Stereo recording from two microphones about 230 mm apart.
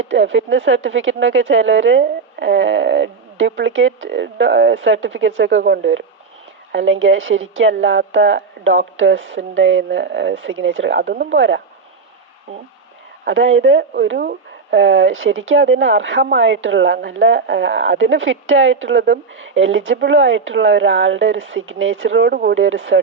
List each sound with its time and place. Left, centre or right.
0.0 s speech: right
13.2 s speech: right